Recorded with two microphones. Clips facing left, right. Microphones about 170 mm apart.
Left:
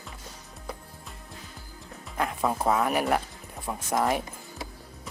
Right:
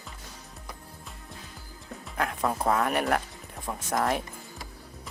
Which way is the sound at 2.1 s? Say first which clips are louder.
Left 1 dB; centre (ahead or behind).